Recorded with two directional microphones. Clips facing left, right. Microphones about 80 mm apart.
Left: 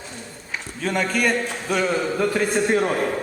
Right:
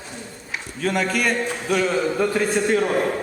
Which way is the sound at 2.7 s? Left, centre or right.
Centre.